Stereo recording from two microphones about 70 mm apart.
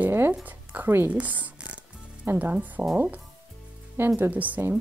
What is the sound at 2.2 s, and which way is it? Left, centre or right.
Speech, right.